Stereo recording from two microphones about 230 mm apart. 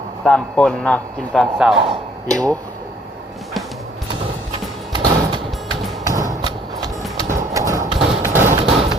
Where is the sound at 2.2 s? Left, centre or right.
Centre.